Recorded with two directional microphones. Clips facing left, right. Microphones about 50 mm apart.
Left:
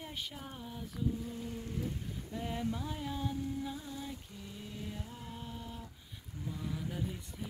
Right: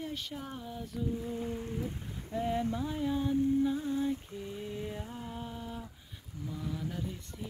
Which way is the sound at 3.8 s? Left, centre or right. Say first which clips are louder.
Right 11 dB; right.